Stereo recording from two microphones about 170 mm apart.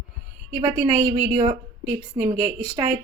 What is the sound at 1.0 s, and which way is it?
Speech, 20° right (ahead or behind).